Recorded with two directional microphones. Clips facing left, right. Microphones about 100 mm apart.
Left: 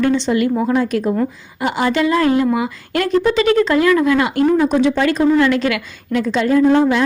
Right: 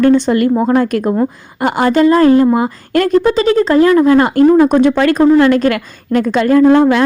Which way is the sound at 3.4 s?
35° right (ahead or behind).